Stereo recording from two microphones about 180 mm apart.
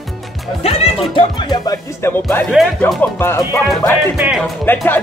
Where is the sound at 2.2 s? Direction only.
Centre (ahead or behind).